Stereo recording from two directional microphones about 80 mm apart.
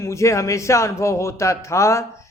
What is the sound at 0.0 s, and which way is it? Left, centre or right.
Speech, left.